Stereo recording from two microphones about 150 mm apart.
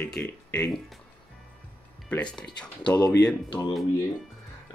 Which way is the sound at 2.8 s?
25° left (ahead or behind).